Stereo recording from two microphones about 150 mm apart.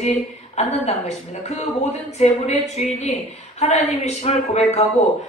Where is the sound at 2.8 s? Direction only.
45° left (ahead or behind).